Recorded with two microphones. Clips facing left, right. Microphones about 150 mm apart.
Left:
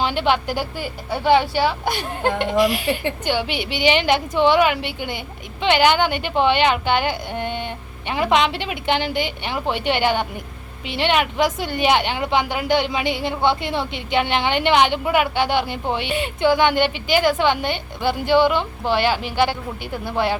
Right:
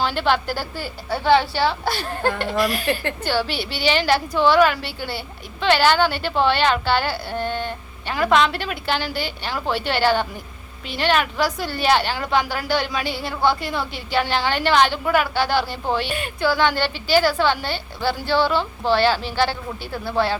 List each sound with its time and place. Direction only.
0.0 s a woman's voice: 15° left (ahead or behind)